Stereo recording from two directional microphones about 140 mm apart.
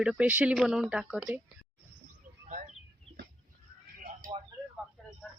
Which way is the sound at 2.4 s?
60° right (ahead or behind).